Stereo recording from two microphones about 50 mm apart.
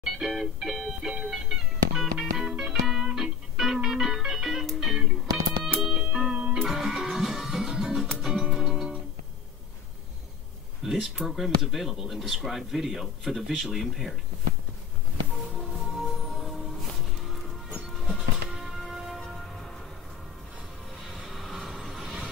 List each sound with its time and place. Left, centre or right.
0.0 s music: centre
5.9 s music: centre
6.6 s music: centre
10.8 s speech: centre
15.6 s music: centre
21.0 s vehicle: centre